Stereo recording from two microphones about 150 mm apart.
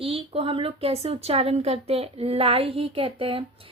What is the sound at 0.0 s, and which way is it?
Speech, 40° right (ahead or behind).